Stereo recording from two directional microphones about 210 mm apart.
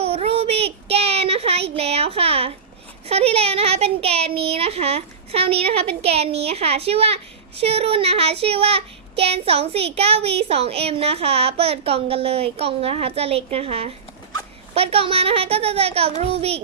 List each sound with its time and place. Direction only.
0.0 s child singing: 30° right (ahead or behind)